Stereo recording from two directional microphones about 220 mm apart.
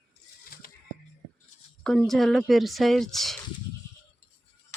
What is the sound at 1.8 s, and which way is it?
Speech, centre (ahead or behind).